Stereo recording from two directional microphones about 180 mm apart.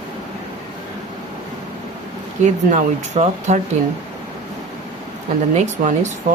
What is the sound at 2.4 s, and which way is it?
Speech, 40° right (ahead or behind).